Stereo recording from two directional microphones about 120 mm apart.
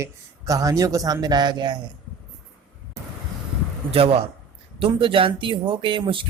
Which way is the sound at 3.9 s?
55° right (ahead or behind).